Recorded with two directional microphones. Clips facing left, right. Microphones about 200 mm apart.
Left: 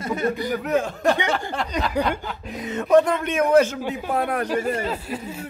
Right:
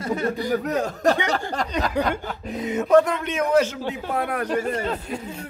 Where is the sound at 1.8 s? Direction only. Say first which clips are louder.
Even; 45° right (ahead or behind).